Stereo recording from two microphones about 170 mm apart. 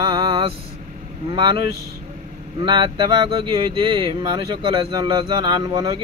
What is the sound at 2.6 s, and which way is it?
Speech, 25° right (ahead or behind).